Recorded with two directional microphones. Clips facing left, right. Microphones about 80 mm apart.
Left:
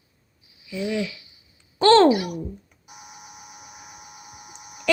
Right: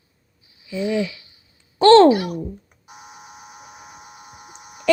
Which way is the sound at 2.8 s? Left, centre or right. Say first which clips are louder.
Right 3 dB; right.